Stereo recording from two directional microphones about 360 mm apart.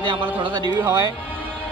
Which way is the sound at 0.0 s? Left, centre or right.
Centre.